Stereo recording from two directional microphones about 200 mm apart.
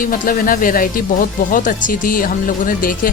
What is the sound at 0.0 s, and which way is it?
Speech, 45° left (ahead or behind).